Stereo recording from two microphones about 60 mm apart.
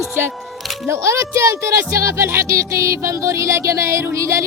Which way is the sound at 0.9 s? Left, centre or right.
Right.